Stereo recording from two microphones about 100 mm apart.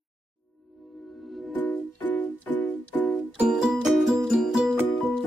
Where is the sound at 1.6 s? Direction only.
15° left (ahead or behind).